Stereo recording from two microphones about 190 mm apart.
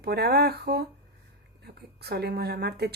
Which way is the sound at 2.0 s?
60° right (ahead or behind).